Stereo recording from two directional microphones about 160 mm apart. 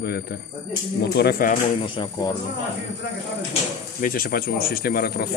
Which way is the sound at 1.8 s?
30° left (ahead or behind).